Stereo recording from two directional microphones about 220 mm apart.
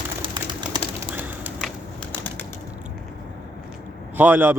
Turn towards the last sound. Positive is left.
turn(degrees=-10)  # may be behind; listen again after turning